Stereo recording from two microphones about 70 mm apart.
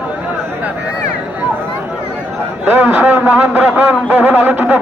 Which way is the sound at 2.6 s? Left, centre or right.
Right.